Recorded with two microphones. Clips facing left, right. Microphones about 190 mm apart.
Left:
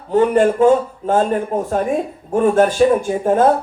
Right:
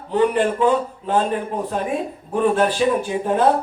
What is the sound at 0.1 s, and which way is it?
A man's voice, 45° left (ahead or behind).